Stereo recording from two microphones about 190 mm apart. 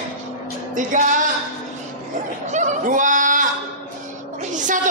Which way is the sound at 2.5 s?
40° right (ahead or behind).